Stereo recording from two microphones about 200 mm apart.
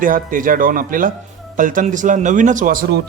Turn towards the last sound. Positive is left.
turn(degrees=-50)  # may be behind; listen again after turning